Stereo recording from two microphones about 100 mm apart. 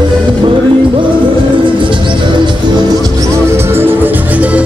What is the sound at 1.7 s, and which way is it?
Music, 55° right (ahead or behind).